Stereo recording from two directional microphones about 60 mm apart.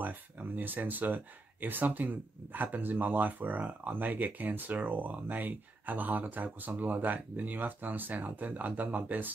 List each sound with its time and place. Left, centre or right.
0.0 s speech: right